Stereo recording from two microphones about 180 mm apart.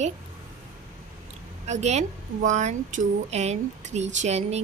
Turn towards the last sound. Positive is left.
turn(degrees=-40)  # may be behind; listen again after turning